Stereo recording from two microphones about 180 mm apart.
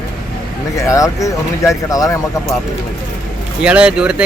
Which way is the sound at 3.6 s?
5° right (ahead or behind).